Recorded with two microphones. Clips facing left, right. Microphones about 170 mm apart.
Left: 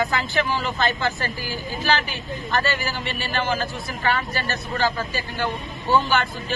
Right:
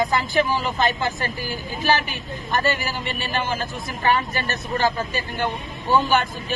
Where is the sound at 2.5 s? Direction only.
15° right (ahead or behind).